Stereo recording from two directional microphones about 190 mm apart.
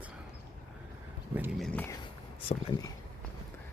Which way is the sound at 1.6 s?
5° left (ahead or behind).